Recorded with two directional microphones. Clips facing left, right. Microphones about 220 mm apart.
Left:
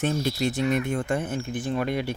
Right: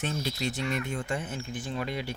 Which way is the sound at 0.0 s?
50° left (ahead or behind).